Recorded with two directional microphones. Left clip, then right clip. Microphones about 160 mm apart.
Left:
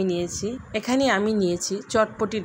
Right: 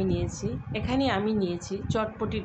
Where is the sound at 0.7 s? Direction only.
55° left (ahead or behind).